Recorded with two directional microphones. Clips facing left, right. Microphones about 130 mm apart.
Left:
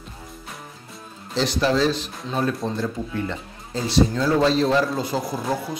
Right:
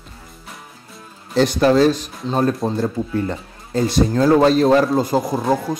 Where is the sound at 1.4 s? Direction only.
50° right (ahead or behind).